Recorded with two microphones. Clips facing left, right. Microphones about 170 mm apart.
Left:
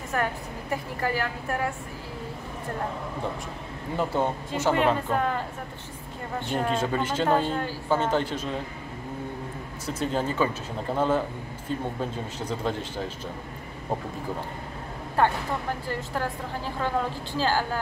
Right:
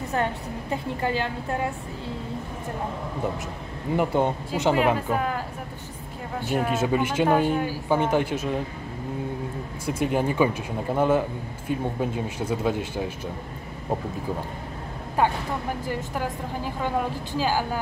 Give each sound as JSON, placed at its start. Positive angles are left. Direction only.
{"t": 0.1, "sound": "a woman's voice", "side_deg": -20}
{"t": 3.9, "sound": "speech", "side_deg": -15}
{"t": 6.4, "sound": "speech", "side_deg": -5}
{"t": 9.8, "sound": "speech", "side_deg": -10}
{"t": 15.2, "sound": "speech", "side_deg": -10}